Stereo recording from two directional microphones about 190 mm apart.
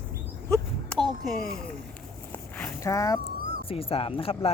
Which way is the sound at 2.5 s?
10° left (ahead or behind).